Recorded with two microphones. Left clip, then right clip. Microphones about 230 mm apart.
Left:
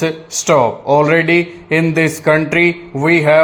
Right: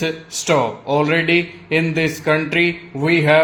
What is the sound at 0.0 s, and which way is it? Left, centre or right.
Speech, left.